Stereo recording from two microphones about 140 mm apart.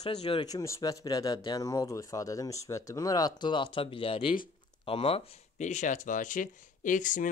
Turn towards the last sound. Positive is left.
turn(degrees=65)  # may be behind; listen again after turning